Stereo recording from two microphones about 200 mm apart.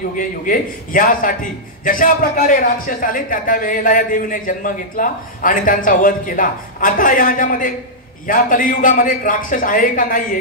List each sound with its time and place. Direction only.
0.1 s a man's voice: 40° left (ahead or behind)